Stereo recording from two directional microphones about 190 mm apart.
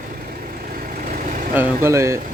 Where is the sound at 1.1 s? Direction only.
45° right (ahead or behind).